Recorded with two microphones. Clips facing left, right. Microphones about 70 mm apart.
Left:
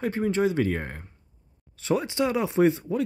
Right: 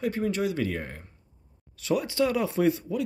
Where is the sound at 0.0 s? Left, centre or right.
Left.